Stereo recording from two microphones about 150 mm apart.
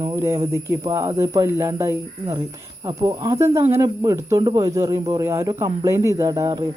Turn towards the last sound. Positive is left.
turn(degrees=-25)  # may be behind; listen again after turning